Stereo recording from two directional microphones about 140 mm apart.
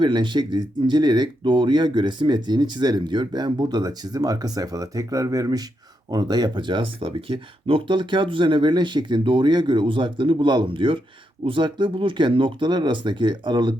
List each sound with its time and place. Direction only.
0.0 s speech: 35° right (ahead or behind)